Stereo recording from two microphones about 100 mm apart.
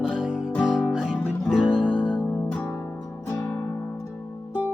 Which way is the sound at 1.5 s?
10° right (ahead or behind).